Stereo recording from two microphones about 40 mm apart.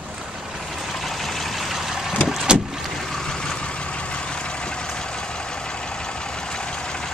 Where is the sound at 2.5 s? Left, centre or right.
Centre.